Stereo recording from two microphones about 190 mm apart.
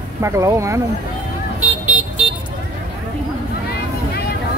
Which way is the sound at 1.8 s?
35° right (ahead or behind).